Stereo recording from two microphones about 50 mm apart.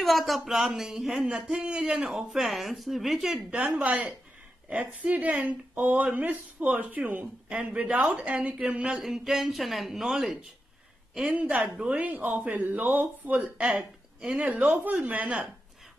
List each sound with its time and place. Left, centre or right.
0.0 s speech: centre
3.4 s a man's voice: right
8.9 s speech: centre
11.8 s a man's voice: right
12.2 s speech: right
14.5 s speech: right
15.0 s a man's voice: right